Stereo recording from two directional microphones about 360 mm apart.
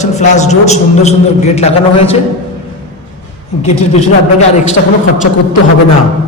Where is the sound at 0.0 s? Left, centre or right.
Centre.